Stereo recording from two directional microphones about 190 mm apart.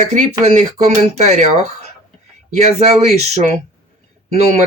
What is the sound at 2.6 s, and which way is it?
Speech, 35° right (ahead or behind).